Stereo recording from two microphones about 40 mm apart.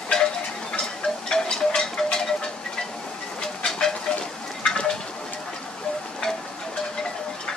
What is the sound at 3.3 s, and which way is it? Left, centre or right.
Train, centre.